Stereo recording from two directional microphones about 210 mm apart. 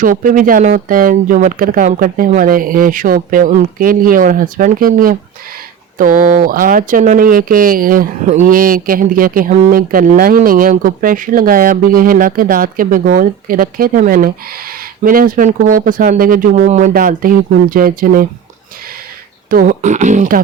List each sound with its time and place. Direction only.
0.0 s speech: 40° right (ahead or behind)
19.5 s speech: 40° right (ahead or behind)